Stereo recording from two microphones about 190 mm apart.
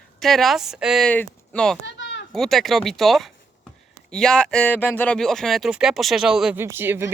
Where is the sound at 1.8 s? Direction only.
70° left (ahead or behind).